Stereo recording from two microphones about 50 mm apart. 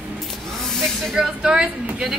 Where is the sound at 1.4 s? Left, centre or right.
Centre.